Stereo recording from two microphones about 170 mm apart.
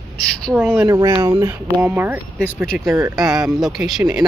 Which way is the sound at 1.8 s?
10° right (ahead or behind).